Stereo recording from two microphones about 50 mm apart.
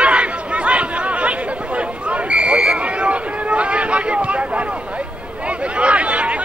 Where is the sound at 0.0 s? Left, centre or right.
Right.